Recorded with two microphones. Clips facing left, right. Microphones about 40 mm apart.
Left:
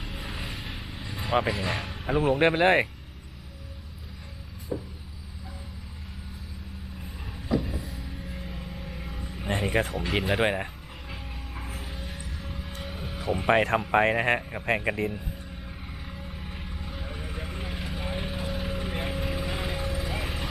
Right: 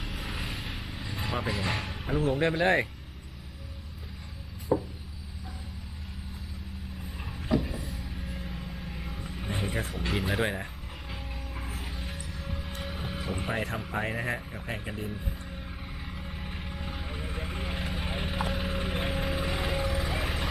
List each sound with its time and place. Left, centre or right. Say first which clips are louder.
0.0 s vehicle: even; centre
1.5 s speech: left 2 dB; centre
2.0 s speech: left 5 dB; left
4.7 s a sound: right 6 dB; centre
7.3 s vehicle: left 1 dB; centre
9.9 s speech: left 3 dB; centre
10.2 s speech: left 4 dB; centre
10.4 s speech: left 5 dB; left
11.1 s music: left 1 dB; centre
12.8 s vehicle: left 3 dB; centre
13.5 s speech: left 12 dB; left
14.8 s speech: left 9 dB; left
16.0 s vehicle: right 1 dB; centre